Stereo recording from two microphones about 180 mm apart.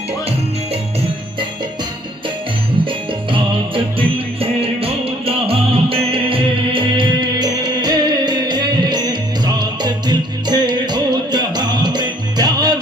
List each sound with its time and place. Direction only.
3.9 s music: 30° right (ahead or behind)